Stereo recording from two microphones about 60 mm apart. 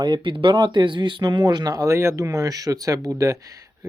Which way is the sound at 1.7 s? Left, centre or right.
Right.